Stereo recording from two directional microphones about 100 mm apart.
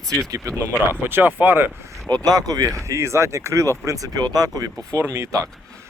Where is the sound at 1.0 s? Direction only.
20° right (ahead or behind).